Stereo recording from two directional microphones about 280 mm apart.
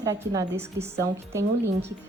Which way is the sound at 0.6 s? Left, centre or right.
Right.